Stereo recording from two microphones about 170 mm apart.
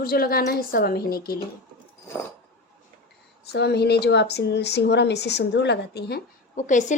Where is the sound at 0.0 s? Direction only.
60° left (ahead or behind).